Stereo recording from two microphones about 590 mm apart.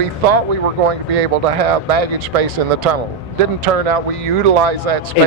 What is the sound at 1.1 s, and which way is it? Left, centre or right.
Speech, right.